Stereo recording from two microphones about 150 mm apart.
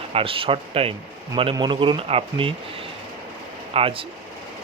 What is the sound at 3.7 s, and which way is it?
Speech, 40° right (ahead or behind).